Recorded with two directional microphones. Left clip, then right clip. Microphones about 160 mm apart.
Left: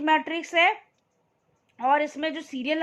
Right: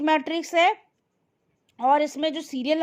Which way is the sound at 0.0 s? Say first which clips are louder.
Even; 35° right (ahead or behind).